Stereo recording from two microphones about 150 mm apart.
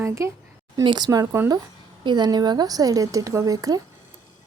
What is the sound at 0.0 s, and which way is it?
A woman's voice, 20° right (ahead or behind).